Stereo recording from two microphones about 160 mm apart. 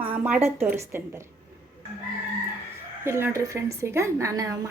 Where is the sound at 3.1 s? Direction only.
15° right (ahead or behind).